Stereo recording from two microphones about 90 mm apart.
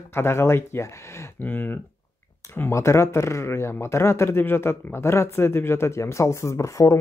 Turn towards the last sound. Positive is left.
turn(degrees=35)  # may be behind; listen again after turning